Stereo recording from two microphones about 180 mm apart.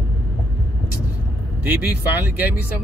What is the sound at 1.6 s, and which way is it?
Speech, 10° right (ahead or behind).